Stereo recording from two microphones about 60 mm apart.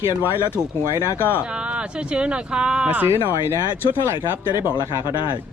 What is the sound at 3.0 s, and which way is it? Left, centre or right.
Speech, right.